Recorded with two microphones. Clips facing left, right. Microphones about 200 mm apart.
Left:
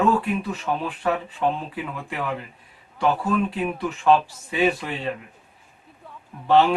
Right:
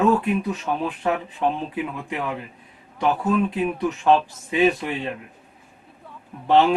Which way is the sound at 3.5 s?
20° right (ahead or behind).